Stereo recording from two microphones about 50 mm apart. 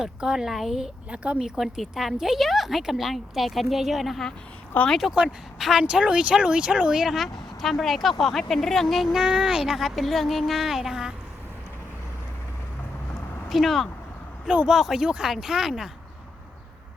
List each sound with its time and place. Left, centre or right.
0.0 s speech: centre
1.1 s speech: right
1.5 s a woman's voice: centre
5.8 s speech: right
7.2 s a woman's voice: centre
9.1 s speech: centre
13.5 s a woman's voice: centre
14.4 s speech: right
14.7 s speech: centre